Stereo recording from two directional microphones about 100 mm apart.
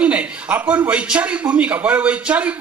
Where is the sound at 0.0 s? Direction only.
10° right (ahead or behind).